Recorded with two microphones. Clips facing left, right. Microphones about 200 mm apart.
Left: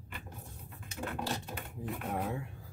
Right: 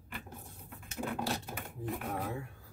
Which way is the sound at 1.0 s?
5° right (ahead or behind).